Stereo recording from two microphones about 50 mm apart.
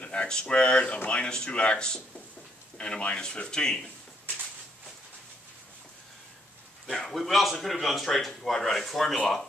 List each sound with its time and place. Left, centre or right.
0.0 s speech: left
6.9 s speech: centre